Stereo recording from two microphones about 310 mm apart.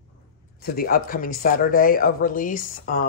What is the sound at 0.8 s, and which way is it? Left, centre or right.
A man's voice, left.